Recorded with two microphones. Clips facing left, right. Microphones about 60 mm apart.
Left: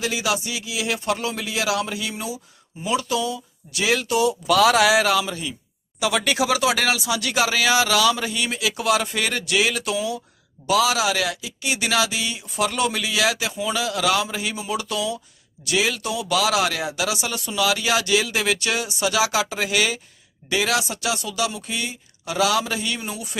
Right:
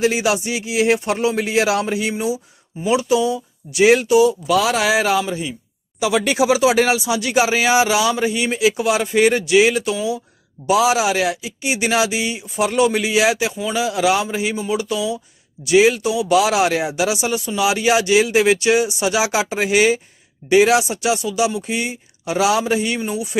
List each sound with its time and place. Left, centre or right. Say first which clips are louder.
0.0 s speech: right 6 dB; right
2.1 s speech: right 9 dB; centre
4.1 s speech: right 5 dB; centre
10.7 s speech: right 4 dB; right
12.4 s speech: right 6 dB; centre
12.9 s speech: right 6 dB; right
13.5 s speech: right 2 dB; centre
13.7 s speech: right 5 dB; centre
15.6 s speech: right 9 dB; right
16.0 s speech: right 7 dB; centre
16.3 s speech: right 5 dB; right
17.7 s speech: right 6 dB; right
23.0 s speech: right 8 dB; centre